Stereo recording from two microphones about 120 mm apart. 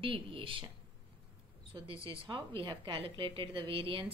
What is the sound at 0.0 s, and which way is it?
Speech, 45° right (ahead or behind).